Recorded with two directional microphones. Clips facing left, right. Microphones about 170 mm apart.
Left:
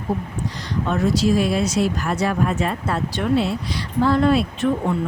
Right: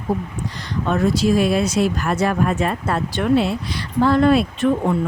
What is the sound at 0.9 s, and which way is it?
Speech, 55° right (ahead or behind).